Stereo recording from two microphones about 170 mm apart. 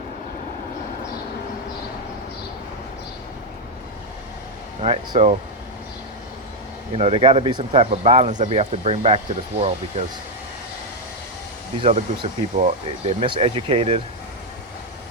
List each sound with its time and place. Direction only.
4.8 s speech: 35° right (ahead or behind)
6.9 s speech: 35° right (ahead or behind)
11.8 s speech: 35° right (ahead or behind)